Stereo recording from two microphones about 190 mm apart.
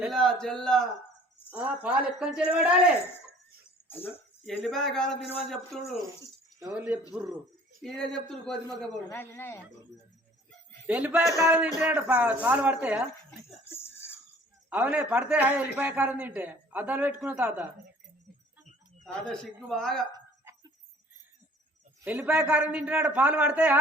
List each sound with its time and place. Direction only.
0.0 s speech: centre (ahead or behind)
3.8 s speech: 10° left (ahead or behind)
4.6 s speech: centre (ahead or behind)
6.6 s a woman's voice: 10° right (ahead or behind)
7.8 s speech: 5° left (ahead or behind)
9.0 s speech: 15° left (ahead or behind)
10.8 s a woman's voice: 10° right (ahead or behind)
13.7 s a sound: 10° left (ahead or behind)
14.7 s a woman's voice: 5° right (ahead or behind)
19.0 s speech: 5° left (ahead or behind)
20.1 s a sound: 15° right (ahead or behind)
22.0 s a woman's voice: 5° right (ahead or behind)